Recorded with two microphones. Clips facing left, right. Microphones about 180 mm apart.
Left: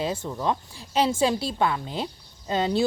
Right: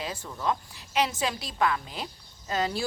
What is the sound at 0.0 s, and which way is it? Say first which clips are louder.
Speech: left 5 dB; 25° left (ahead or behind).